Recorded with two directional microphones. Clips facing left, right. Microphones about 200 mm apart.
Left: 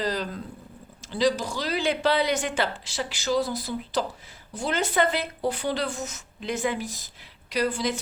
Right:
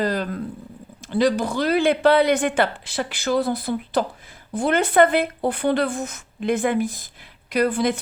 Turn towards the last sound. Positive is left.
turn(degrees=-55)  # may be behind; listen again after turning